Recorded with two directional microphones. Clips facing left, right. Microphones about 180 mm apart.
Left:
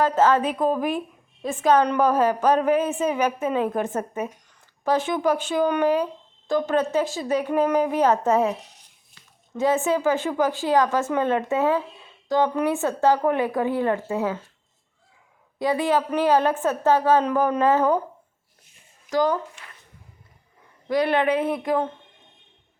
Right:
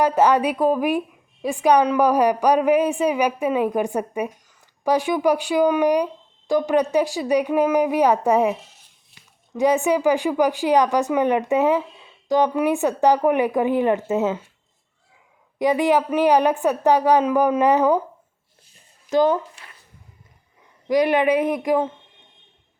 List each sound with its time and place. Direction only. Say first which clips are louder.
0.0 s a woman's voice: right 2 dB; 15° right (ahead or behind)
15.5 s speech: right 4 dB; 15° right (ahead or behind)
19.1 s speech: right 4 dB; 20° right (ahead or behind)
20.8 s speech: right 3 dB; 15° right (ahead or behind)